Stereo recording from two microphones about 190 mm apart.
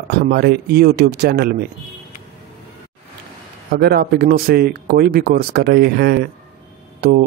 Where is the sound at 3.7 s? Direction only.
55° right (ahead or behind).